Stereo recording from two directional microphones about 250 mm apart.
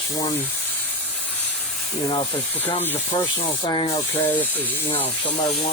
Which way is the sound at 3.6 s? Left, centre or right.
Centre.